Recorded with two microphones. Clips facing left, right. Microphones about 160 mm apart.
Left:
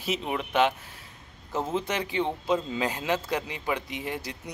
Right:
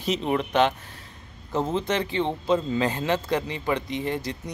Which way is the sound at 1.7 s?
10° left (ahead or behind).